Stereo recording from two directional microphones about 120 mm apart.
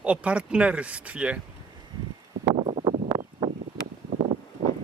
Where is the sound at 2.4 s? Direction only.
50° right (ahead or behind).